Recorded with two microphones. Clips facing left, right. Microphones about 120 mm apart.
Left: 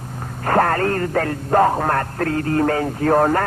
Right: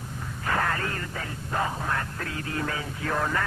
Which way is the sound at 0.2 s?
50° left (ahead or behind).